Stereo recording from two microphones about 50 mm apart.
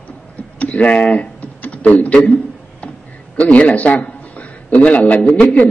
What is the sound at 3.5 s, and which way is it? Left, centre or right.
A man's voice, left.